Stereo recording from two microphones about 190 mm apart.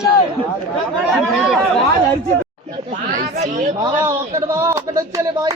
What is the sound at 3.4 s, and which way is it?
Speech, 40° right (ahead or behind).